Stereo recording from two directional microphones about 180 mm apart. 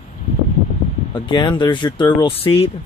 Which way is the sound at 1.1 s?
25° left (ahead or behind).